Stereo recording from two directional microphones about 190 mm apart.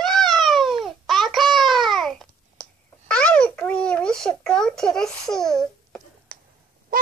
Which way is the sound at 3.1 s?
5° left (ahead or behind).